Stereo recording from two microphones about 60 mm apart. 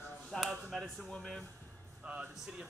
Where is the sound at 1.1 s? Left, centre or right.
Centre.